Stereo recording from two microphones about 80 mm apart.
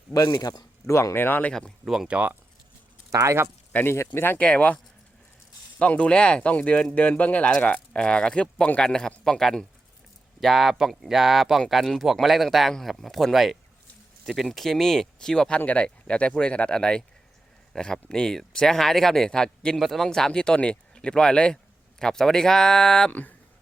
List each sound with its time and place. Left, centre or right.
0.1 s speech: left
0.9 s speech: left
1.8 s speech: centre
2.1 s speech: right
3.1 s speech: right
3.8 s speech: left
4.4 s speech: centre
5.8 s speech: centre